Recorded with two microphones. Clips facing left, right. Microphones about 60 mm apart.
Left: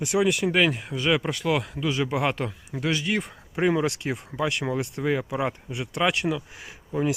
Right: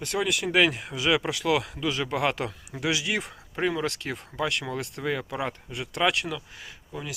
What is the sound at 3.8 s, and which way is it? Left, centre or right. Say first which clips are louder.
Speech: left 4 dB; centre.